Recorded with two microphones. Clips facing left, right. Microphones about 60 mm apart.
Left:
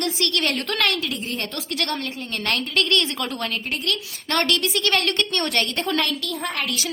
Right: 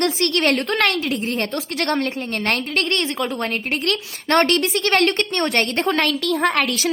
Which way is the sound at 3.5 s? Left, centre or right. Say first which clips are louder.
Right 4 dB; right.